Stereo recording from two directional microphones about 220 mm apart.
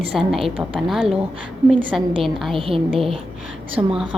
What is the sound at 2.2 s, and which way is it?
Speech, centre (ahead or behind).